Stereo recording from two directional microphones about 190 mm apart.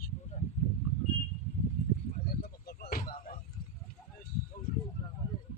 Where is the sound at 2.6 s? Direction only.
55° left (ahead or behind).